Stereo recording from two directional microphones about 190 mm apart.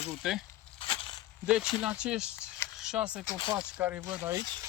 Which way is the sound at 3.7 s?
10° right (ahead or behind).